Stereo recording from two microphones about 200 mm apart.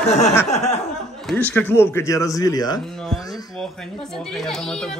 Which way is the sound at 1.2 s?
5° left (ahead or behind).